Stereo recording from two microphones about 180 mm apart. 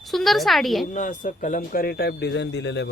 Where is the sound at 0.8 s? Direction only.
45° left (ahead or behind).